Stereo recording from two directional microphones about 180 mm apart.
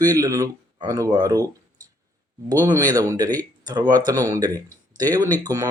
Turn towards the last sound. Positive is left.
turn(degrees=-20)  # may be behind; listen again after turning